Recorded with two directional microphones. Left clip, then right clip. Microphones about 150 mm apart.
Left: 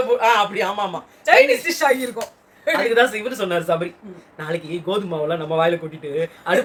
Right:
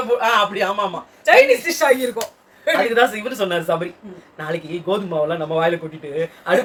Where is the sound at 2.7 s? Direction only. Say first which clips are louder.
Right 1 dB; 25° left (ahead or behind).